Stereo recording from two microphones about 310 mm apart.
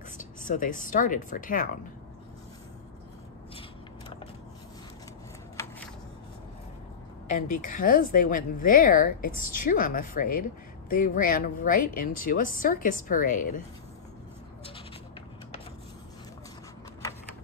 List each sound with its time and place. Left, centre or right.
0.2 s speech: left
7.2 s speech: left